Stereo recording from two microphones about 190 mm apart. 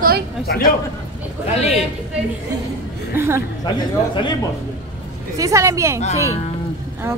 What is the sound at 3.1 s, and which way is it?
Speech, 10° right (ahead or behind).